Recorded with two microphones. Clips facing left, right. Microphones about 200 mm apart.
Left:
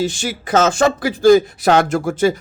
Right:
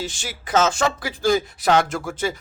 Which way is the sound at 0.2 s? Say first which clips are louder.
Even; 65° left (ahead or behind).